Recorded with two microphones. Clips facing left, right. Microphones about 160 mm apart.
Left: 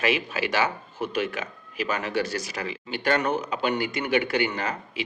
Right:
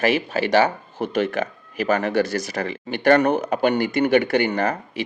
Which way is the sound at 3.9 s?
40° right (ahead or behind).